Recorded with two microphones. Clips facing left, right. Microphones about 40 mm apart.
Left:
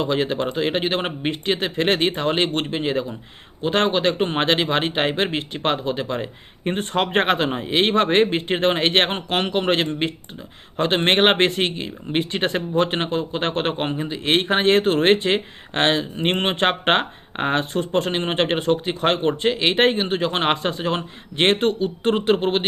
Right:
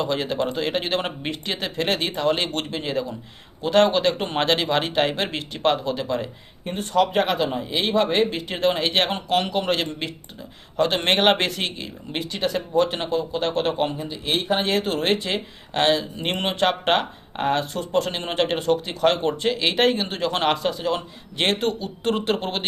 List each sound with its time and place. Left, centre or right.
0.0 s speech: centre
6.7 s speech: left
14.3 s speech: left